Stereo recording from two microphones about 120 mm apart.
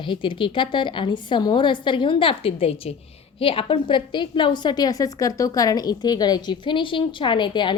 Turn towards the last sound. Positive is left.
turn(degrees=40)  # may be behind; listen again after turning